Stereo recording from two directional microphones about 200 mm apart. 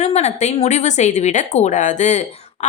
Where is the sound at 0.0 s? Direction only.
35° left (ahead or behind).